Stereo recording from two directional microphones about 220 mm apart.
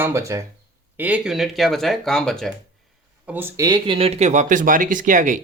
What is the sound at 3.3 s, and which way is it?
Speech, 10° right (ahead or behind).